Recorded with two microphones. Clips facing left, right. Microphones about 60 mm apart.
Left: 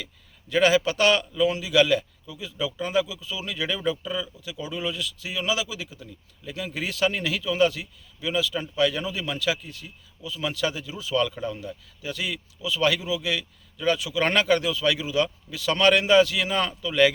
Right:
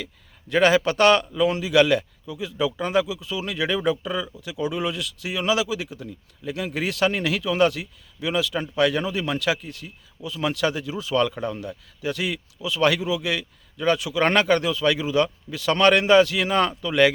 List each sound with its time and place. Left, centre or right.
0.0 s a man's voice: right
13.0 s speech: centre
13.7 s speech: right